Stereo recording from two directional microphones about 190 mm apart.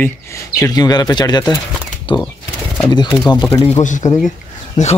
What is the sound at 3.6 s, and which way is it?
Speech, 40° left (ahead or behind).